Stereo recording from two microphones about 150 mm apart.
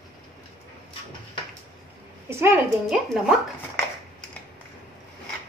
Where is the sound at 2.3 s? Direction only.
15° right (ahead or behind).